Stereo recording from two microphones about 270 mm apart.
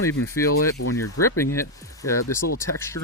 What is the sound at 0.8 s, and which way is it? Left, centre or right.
Speech, left.